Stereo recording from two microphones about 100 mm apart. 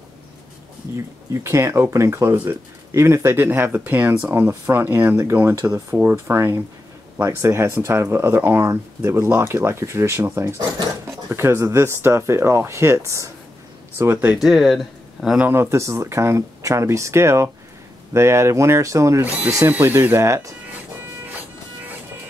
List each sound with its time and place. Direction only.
0.9 s speech: 30° right (ahead or behind)
14.3 s speech: 5° right (ahead or behind)
15.3 s speech: 20° right (ahead or behind)